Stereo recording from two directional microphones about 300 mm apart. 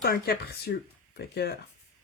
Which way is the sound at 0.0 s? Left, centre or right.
Left.